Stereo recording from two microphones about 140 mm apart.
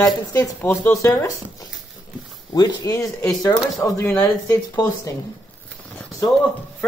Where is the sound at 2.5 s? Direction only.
30° left (ahead or behind).